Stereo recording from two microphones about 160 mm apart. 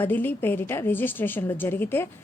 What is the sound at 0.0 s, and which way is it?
A woman's voice, 10° left (ahead or behind).